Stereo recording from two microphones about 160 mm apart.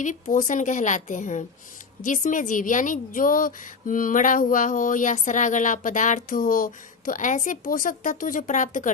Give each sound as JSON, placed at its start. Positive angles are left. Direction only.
{"t": 0.0, "sound": "a woman's voice", "side_deg": 55}